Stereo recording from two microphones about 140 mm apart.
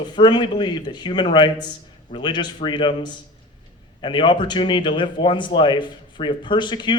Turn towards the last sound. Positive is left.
turn(degrees=35)  # may be behind; listen again after turning